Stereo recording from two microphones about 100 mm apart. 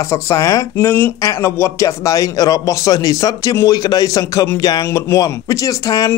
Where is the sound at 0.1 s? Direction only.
35° left (ahead or behind).